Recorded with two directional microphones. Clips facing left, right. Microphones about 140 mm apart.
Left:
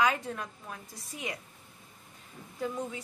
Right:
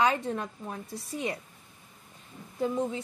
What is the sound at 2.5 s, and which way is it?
Speech, 25° right (ahead or behind).